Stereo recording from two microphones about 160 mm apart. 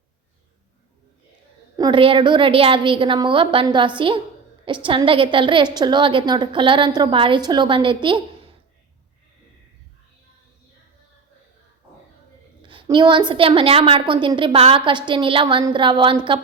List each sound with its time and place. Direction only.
1.7 s a woman's voice: 25° right (ahead or behind)
12.6 s a woman's voice: 30° right (ahead or behind)